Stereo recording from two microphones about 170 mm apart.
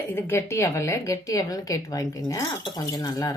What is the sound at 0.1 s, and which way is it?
A woman's voice, 15° left (ahead or behind).